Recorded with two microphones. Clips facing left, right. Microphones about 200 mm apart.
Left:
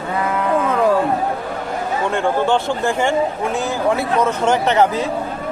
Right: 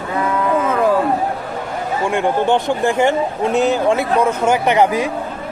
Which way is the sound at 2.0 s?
15° right (ahead or behind).